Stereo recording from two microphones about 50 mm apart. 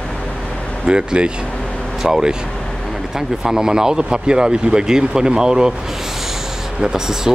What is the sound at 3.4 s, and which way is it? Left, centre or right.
Speech, centre.